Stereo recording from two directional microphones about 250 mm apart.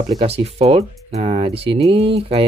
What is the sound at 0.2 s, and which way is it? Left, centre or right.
Speech, right.